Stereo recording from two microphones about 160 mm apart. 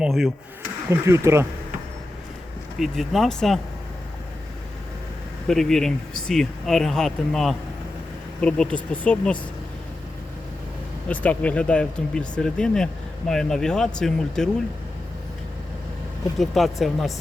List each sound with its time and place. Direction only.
0.0 s speech: centre (ahead or behind)
0.9 s speech: 15° right (ahead or behind)
2.7 s speech: centre (ahead or behind)
5.5 s speech: centre (ahead or behind)
11.1 s speech: 10° left (ahead or behind)
16.4 s speech: centre (ahead or behind)